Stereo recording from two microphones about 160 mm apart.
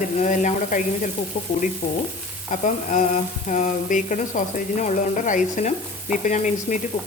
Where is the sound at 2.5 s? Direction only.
50° left (ahead or behind).